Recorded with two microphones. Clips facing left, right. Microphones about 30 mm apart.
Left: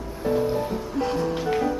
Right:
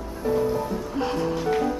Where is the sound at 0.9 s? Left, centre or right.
Centre.